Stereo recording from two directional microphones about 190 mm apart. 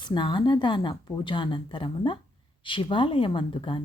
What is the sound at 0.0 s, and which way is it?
Speech, 25° left (ahead or behind).